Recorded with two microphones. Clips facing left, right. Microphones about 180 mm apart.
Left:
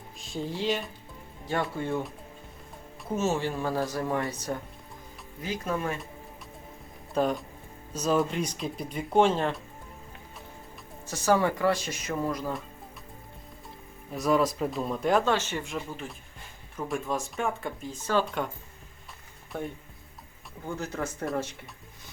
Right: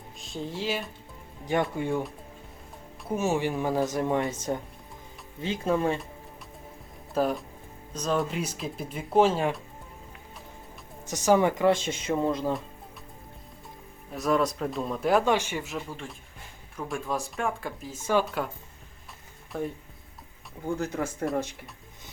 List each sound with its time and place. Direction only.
0.2 s speech: centre (ahead or behind)
1.7 s speech: 15° right (ahead or behind)
3.1 s speech: 15° right (ahead or behind); by 6.0 s 30° right (ahead or behind)
7.1 s speech: 5° right (ahead or behind)
11.0 s speech: 20° right (ahead or behind)
14.1 s speech: centre (ahead or behind)
15.2 s speech: 15° right (ahead or behind)
18.0 s speech: 10° right (ahead or behind)
18.3 s speech: centre (ahead or behind)
19.5 s speech: centre (ahead or behind)
20.8 s speech: 10° right (ahead or behind)